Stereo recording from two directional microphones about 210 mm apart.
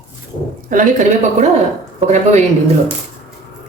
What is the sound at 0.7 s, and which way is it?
Speech, 35° right (ahead or behind).